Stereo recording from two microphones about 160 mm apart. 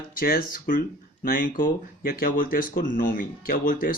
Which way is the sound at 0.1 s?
60° left (ahead or behind).